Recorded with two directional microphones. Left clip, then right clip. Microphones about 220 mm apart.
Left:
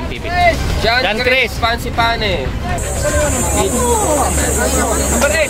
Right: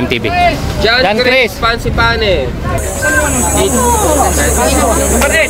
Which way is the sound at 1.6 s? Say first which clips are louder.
Right 3 dB; 35° left (ahead or behind).